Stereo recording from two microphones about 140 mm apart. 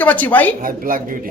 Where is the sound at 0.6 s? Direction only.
85° right.